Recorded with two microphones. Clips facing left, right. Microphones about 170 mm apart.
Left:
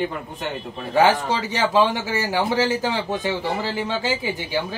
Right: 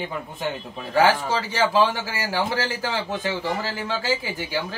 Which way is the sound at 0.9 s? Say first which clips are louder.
Left 2 dB; 20° left (ahead or behind).